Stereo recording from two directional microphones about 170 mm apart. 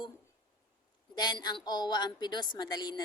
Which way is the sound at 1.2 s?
25° left (ahead or behind).